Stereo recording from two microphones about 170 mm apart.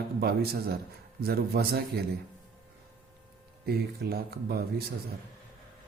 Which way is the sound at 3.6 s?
65° right (ahead or behind).